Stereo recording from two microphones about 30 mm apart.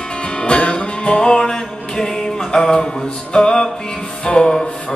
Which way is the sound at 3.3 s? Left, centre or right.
Left.